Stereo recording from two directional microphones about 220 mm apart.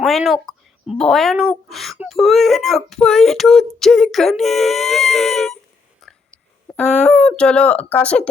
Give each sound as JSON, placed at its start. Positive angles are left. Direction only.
{"t": 0.0, "sound": "speech", "side_deg": 0}
{"t": 6.0, "sound": "whispering", "side_deg": 0}
{"t": 6.7, "sound": "dog", "side_deg": 5}
{"t": 7.0, "sound": "a sound", "side_deg": 30}
{"t": 7.3, "sound": "speech", "side_deg": 5}